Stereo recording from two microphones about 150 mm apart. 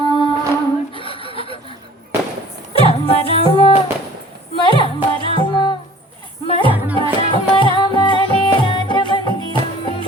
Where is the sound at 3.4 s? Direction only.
40° left (ahead or behind).